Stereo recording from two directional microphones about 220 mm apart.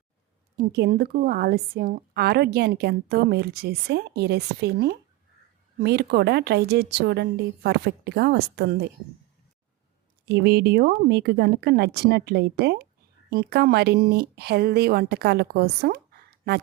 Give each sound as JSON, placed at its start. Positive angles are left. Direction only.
{"t": 0.7, "sound": "a woman's voice", "side_deg": -45}
{"t": 10.2, "sound": "a woman's voice", "side_deg": -50}